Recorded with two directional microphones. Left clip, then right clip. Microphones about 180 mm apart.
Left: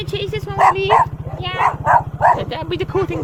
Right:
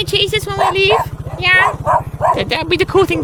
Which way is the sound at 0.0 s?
45° right (ahead or behind).